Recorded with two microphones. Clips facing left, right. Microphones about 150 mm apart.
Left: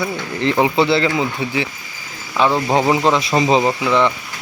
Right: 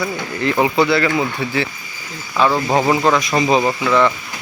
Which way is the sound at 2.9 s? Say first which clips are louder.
Even; 25° left (ahead or behind).